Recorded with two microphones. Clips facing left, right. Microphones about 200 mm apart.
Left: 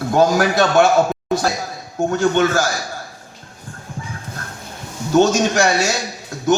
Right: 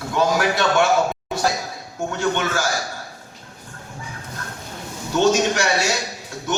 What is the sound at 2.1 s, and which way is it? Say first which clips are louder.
Speech: left 6 dB; 40° left (ahead or behind).